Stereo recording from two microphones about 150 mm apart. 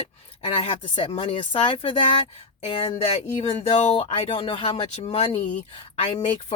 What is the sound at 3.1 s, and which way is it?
Speech, 45° left (ahead or behind).